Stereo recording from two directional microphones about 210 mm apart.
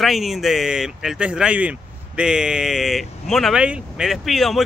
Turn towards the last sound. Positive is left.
turn(degrees=0)  # may be behind; listen again after turning